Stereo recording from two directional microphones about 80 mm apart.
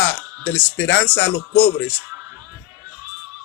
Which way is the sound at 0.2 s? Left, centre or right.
Centre.